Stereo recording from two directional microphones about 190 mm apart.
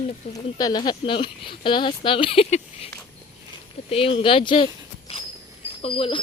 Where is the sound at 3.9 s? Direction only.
30° left (ahead or behind).